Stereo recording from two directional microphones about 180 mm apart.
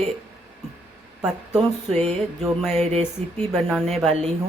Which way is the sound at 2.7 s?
35° right (ahead or behind).